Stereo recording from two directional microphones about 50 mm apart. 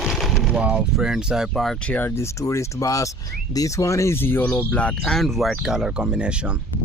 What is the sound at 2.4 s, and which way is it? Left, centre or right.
Speech, left.